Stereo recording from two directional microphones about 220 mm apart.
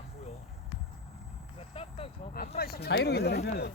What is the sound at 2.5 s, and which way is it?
Speech, 45° left (ahead or behind).